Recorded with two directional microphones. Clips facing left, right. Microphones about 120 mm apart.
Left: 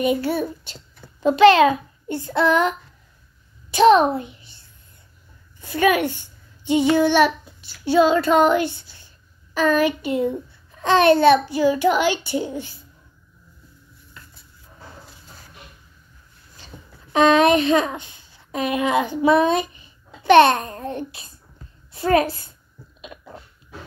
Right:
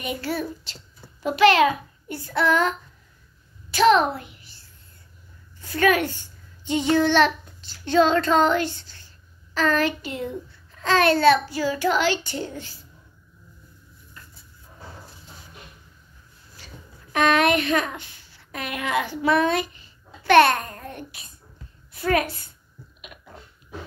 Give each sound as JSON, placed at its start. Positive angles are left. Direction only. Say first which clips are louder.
{"t": 0.0, "sound": "a child's voice", "louder": "left 7 dB", "side_deg": 20}
{"t": 3.7, "sound": "a child's voice", "louder": "left 4 dB", "side_deg": 20}
{"t": 14.2, "sound": "dishes", "louder": "left 1 dB", "side_deg": 90}
{"t": 17.1, "sound": "a woman's voice", "louder": "left 5 dB", "side_deg": 20}